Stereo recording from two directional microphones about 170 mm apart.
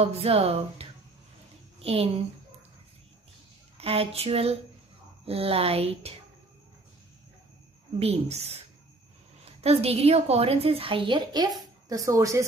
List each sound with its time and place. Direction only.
0.0 s a woman's voice: 35° right (ahead or behind)
3.7 s a woman's voice: 35° right (ahead or behind)
8.0 s a woman's voice: 40° right (ahead or behind); by 12.4 s 20° right (ahead or behind)